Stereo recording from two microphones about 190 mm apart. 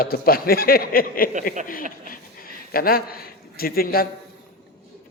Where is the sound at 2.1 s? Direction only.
50° left (ahead or behind).